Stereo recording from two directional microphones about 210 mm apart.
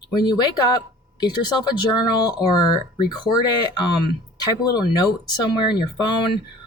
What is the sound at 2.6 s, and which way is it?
Speech, 20° left (ahead or behind).